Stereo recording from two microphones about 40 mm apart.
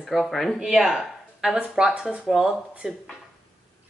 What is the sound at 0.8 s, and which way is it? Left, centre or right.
Speech, centre.